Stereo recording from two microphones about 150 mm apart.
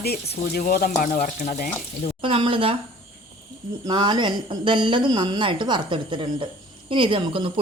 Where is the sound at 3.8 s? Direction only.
30° right (ahead or behind).